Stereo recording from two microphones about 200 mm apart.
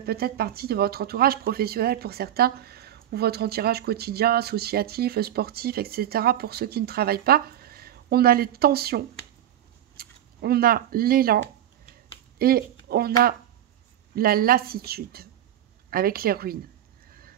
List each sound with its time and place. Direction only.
0.0 s speech: 50° right (ahead or behind)
12.4 s speech: 50° right (ahead or behind)
14.1 s speech: 50° right (ahead or behind)